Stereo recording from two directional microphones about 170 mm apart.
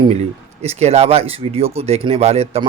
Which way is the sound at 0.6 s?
40° right (ahead or behind).